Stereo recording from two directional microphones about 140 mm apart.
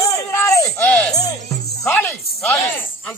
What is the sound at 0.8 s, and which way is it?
Speech, 10° left (ahead or behind).